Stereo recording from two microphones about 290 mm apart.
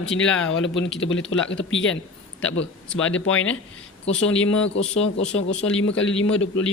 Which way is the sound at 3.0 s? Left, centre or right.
Left.